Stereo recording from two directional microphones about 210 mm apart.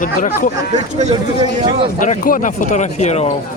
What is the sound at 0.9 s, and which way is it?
Speech, 30° right (ahead or behind).